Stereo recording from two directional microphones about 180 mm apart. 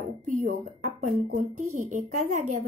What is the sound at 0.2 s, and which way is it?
Speech, 45° right (ahead or behind).